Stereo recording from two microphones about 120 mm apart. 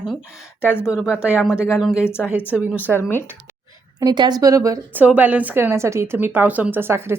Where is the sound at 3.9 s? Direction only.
40° right (ahead or behind).